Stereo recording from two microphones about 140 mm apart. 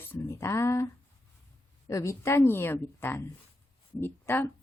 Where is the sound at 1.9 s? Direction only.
20° left (ahead or behind).